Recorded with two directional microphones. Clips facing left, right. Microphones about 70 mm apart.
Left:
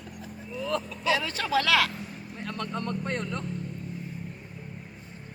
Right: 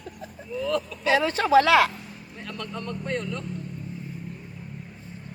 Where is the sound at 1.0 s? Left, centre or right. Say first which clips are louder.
Right 7 dB; right.